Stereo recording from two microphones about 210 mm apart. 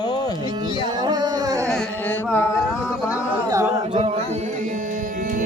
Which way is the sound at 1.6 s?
5° left (ahead or behind).